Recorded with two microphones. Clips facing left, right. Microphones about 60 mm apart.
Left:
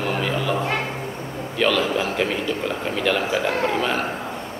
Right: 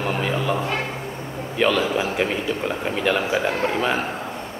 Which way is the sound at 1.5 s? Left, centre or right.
Centre.